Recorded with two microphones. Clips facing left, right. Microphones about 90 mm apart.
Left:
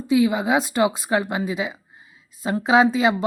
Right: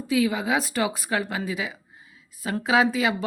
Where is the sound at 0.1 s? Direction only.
20° left (ahead or behind).